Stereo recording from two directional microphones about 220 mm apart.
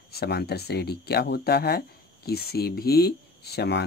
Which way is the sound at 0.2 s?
50° left (ahead or behind).